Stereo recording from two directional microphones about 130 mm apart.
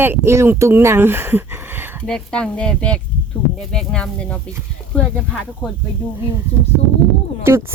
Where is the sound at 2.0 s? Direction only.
5° left (ahead or behind).